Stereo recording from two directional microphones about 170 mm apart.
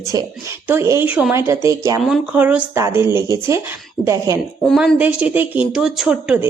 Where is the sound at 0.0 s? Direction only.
20° right (ahead or behind).